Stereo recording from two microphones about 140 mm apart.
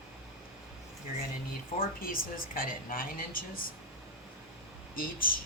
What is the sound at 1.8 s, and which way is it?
A woman's voice, 90° left.